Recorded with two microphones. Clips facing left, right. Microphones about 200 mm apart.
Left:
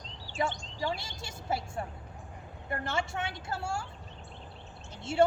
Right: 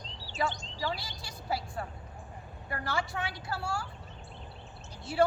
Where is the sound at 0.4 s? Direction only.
20° left (ahead or behind).